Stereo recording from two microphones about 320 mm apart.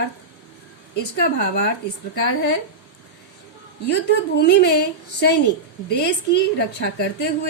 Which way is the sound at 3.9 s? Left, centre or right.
Left.